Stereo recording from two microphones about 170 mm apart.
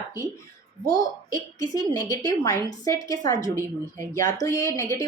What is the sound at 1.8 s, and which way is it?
Speech, 25° right (ahead or behind).